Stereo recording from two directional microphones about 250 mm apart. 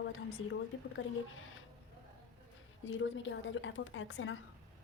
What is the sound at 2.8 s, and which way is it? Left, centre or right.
A woman's voice, left.